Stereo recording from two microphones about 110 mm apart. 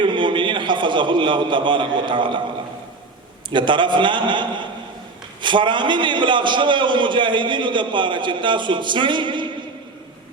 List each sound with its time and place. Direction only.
0.0 s a man's voice: 45° right (ahead or behind)
3.5 s a man's voice: 45° right (ahead or behind)